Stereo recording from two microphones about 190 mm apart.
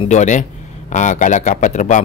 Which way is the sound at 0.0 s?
40° left (ahead or behind).